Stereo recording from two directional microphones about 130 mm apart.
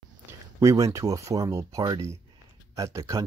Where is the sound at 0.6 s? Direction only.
25° right (ahead or behind).